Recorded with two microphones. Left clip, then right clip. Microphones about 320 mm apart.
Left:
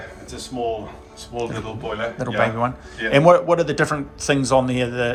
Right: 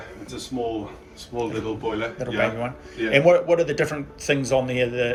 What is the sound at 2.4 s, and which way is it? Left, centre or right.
Speech, left.